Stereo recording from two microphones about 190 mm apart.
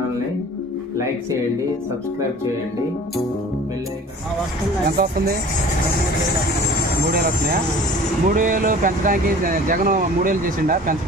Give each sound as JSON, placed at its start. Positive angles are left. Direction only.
{"t": 4.8, "sound": "speech", "side_deg": -55}
{"t": 7.2, "sound": "speech", "side_deg": -50}